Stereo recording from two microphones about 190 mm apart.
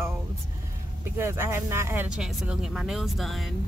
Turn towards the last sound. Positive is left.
turn(degrees=0)  # may be behind; listen again after turning